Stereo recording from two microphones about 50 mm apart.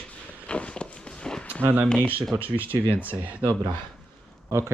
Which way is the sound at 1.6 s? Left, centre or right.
Right.